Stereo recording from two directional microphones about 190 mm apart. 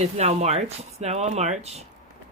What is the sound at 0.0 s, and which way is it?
Speech, 35° right (ahead or behind).